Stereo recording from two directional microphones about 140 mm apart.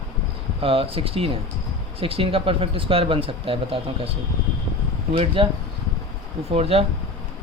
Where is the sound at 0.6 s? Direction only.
40° right (ahead or behind).